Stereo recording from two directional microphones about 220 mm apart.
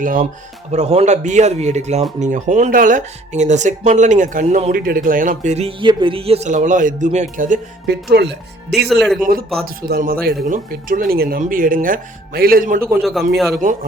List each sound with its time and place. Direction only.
0.0 s speech: 35° right (ahead or behind)
8.1 s speech: 50° right (ahead or behind)
8.9 s speech: centre (ahead or behind)
9.6 s speech: 40° right (ahead or behind)
13.0 s speech: centre (ahead or behind)